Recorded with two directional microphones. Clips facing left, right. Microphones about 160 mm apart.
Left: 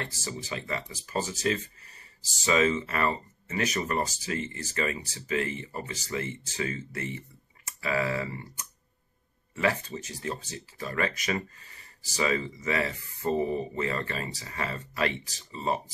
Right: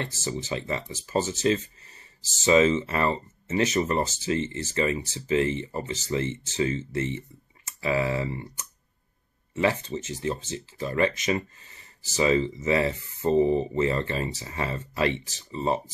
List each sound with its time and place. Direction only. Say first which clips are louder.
0.0 s speech: right 5 dB; 25° right (ahead or behind)